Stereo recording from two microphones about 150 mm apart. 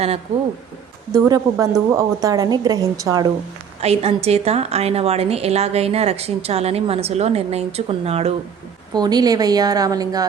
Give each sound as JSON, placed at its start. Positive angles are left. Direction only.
{"t": 1.1, "sound": "speech", "side_deg": -20}
{"t": 3.8, "sound": "a woman's voice", "side_deg": -45}
{"t": 8.9, "sound": "speech", "side_deg": -25}